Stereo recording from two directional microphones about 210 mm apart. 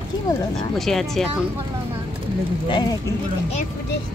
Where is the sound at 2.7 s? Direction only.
20° left (ahead or behind).